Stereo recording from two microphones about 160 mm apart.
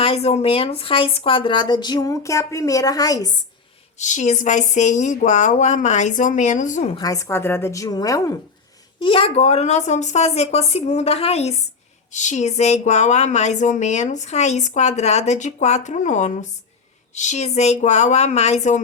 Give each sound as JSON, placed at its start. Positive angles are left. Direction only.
{"t": 0.0, "sound": "speech", "side_deg": 40}
{"t": 3.9, "sound": "speech", "side_deg": 50}
{"t": 6.9, "sound": "speech", "side_deg": 20}
{"t": 9.0, "sound": "speech", "side_deg": 35}